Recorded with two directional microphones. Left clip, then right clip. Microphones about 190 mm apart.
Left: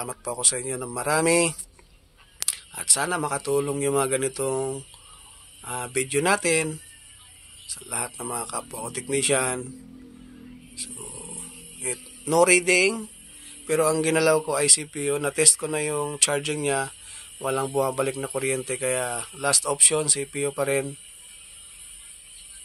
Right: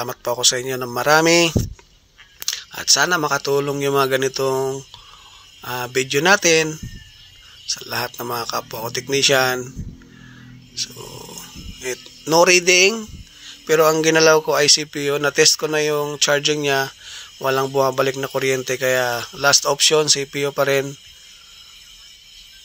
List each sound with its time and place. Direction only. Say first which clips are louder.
0.0 s a man's voice: right 9 dB; 20° right (ahead or behind)
10.8 s a man's voice: right 10 dB; 20° right (ahead or behind)